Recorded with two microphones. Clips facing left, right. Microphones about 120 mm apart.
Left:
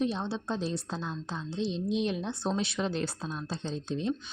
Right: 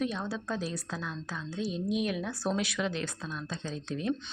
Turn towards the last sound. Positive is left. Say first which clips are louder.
# left 2 dB
turn(degrees=25)  # may be behind; listen again after turning